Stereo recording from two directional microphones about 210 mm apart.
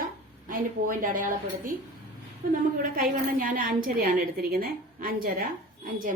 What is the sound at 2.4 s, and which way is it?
A woman's voice, 40° right (ahead or behind).